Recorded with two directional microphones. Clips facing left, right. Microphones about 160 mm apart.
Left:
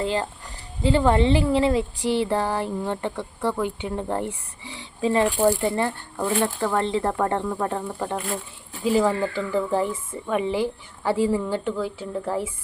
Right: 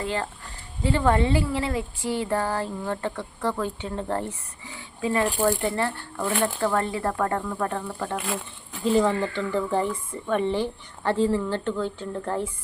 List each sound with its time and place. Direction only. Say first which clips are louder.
0.0 s speech: left 4 dB; 25° left (ahead or behind)
4.9 s speech: left 3 dB; 25° left (ahead or behind)
8.8 s speech: left 1 dB; 5° left (ahead or behind)